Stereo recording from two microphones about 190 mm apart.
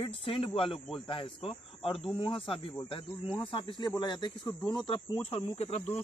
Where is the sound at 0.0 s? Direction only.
30° left (ahead or behind).